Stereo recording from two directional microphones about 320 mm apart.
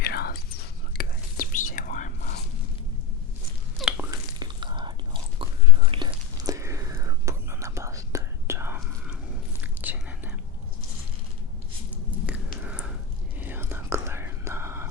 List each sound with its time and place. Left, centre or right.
0.0 s whispering: left
3.8 s whispering: centre
12.2 s a sound: centre
13.4 s whispering: centre